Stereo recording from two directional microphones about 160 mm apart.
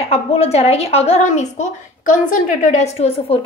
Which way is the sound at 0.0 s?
40° left (ahead or behind).